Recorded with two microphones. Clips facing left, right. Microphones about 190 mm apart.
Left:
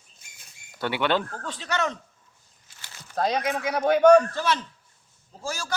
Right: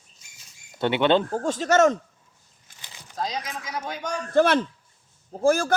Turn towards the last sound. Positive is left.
turn(degrees=-55)  # may be behind; listen again after turning